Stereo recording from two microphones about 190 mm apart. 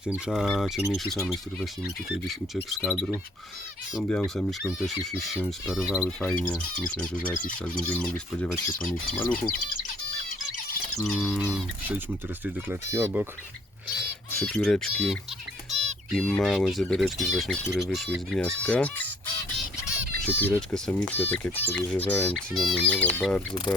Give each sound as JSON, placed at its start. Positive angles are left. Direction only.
{"t": 0.0, "sound": "speech", "side_deg": -5}
{"t": 2.6, "sound": "speech", "side_deg": 0}
{"t": 7.3, "sound": "speech", "side_deg": 45}
{"t": 7.9, "sound": "speech", "side_deg": 5}
{"t": 8.5, "sound": "speech", "side_deg": 45}
{"t": 11.0, "sound": "speech", "side_deg": 5}
{"t": 12.5, "sound": "speech", "side_deg": -10}
{"t": 14.3, "sound": "speech", "side_deg": 5}
{"t": 20.2, "sound": "speech", "side_deg": 10}